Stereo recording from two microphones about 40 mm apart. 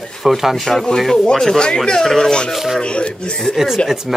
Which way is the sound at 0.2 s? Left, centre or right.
Centre.